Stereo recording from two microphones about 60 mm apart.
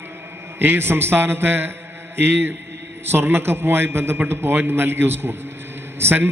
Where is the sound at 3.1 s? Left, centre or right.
Right.